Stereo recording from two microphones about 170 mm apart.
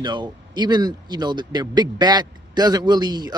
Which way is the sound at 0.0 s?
25° right (ahead or behind).